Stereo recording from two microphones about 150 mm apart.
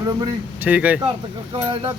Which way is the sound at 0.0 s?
25° right (ahead or behind).